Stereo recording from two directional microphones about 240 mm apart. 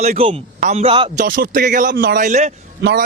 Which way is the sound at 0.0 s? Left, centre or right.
Right.